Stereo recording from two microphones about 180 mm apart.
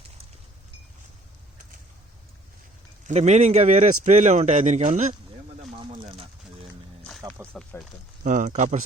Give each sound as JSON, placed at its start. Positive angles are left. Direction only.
{"t": 3.1, "sound": "a man's voice", "side_deg": -40}
{"t": 5.7, "sound": "a sound", "side_deg": -30}
{"t": 7.5, "sound": "speech", "side_deg": 0}
{"t": 8.2, "sound": "speech", "side_deg": -45}